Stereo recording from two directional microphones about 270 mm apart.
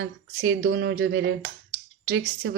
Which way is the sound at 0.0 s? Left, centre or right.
Right.